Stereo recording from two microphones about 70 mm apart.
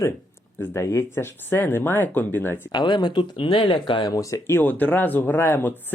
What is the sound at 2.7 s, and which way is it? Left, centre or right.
Speech, left.